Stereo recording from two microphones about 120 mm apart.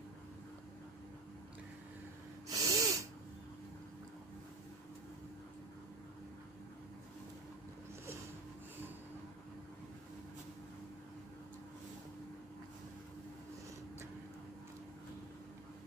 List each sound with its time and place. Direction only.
2.5 s sneeze: 30° right (ahead or behind)